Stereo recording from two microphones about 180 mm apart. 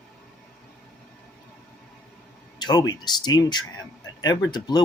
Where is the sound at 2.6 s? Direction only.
25° left (ahead or behind).